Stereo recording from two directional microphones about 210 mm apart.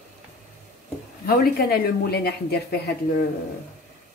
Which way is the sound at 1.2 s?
45° left (ahead or behind).